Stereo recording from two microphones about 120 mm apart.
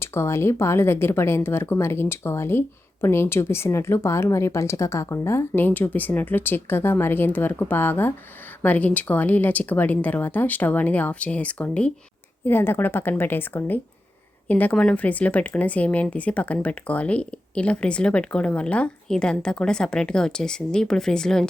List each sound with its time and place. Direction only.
0.0 s speech: 20° left (ahead or behind); by 21.4 s 5° left (ahead or behind)